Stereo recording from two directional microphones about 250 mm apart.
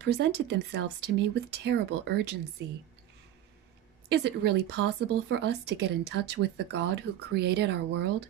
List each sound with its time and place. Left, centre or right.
0.0 s speech: right
4.1 s speech: right